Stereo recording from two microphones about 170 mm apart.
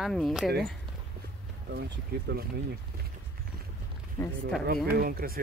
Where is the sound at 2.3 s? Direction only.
80° right.